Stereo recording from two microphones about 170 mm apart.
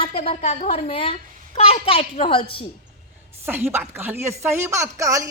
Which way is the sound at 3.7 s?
10° right (ahead or behind).